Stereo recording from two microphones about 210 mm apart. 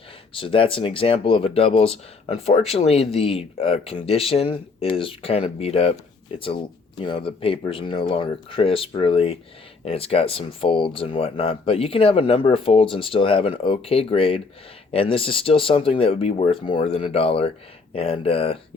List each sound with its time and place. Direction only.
0.3 s speech: 25° left (ahead or behind)
7.0 s speech: 25° left (ahead or behind)